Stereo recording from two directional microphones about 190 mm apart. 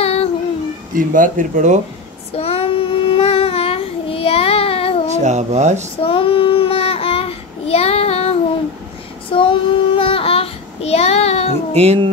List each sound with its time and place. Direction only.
0.0 s child singing: 30° left (ahead or behind)
0.9 s speech: 45° right (ahead or behind)
2.3 s child singing: 30° left (ahead or behind)
5.1 s speech: 35° right (ahead or behind)
6.0 s child singing: 30° left (ahead or behind)
11.7 s speech: 35° right (ahead or behind)